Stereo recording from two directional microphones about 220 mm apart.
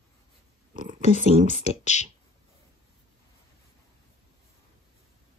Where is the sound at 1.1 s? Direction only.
35° right (ahead or behind).